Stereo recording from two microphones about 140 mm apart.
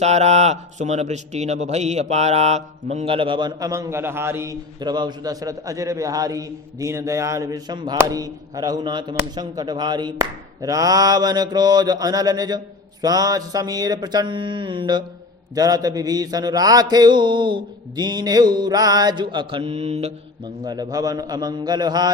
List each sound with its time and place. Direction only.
0.0 s a man's voice: 50° right (ahead or behind); by 4.5 s 20° right (ahead or behind)
4.8 s speech: 30° right (ahead or behind); by 20.1 s 50° right (ahead or behind)
20.7 s speech: 30° right (ahead or behind)